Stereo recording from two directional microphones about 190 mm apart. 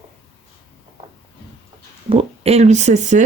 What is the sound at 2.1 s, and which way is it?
Speech, 30° right (ahead or behind).